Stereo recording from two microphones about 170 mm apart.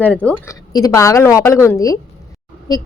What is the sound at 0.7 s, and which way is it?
A woman's voice, 20° left (ahead or behind).